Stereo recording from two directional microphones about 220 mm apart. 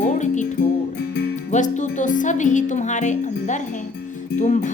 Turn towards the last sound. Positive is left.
turn(degrees=35)  # may be behind; listen again after turning